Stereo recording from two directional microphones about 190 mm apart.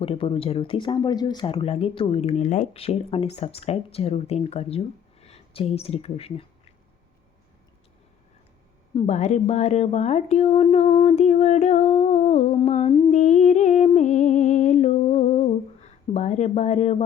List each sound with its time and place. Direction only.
0.0 s speech: 30° left (ahead or behind)
9.0 s speech: 40° left (ahead or behind)
13.1 s music: 40° left (ahead or behind)